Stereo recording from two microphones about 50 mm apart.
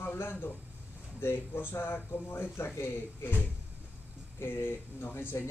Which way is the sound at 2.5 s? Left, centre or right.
Left.